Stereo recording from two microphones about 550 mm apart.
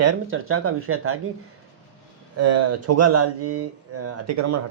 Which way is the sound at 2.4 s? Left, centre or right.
Right.